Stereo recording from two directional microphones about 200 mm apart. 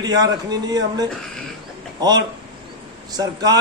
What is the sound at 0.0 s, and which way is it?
A man's voice, 20° right (ahead or behind).